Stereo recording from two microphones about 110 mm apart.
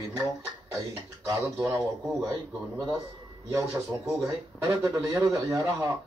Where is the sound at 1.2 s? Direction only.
25° right (ahead or behind).